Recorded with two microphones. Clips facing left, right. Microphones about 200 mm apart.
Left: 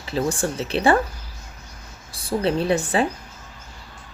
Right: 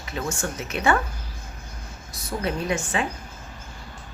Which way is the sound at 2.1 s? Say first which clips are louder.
Left 6 dB; 30° left (ahead or behind).